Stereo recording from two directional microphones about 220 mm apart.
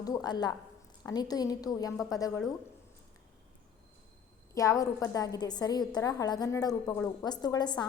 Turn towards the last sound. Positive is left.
turn(degrees=20)  # may be behind; listen again after turning